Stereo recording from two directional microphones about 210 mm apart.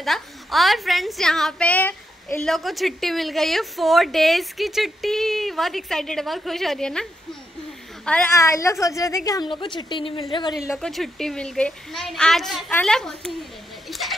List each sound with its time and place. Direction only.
0.0 s a woman's voice: centre (ahead or behind); by 10.2 s 25° left (ahead or behind)
10.8 s a woman's voice: centre (ahead or behind)
13.8 s a sound: centre (ahead or behind)